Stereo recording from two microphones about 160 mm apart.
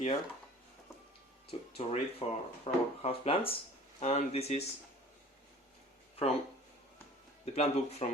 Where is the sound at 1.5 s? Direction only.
40° left (ahead or behind).